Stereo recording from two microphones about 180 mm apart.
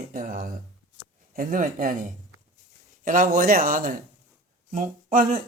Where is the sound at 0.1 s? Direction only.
50° right (ahead or behind).